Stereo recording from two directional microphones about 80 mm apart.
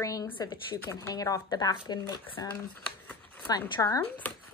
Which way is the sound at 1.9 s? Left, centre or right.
Left.